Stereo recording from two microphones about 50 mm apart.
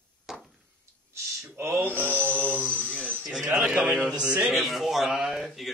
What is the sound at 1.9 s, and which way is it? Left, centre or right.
Music, left.